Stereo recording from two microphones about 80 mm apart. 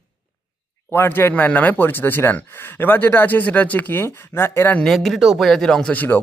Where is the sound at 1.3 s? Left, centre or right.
Centre.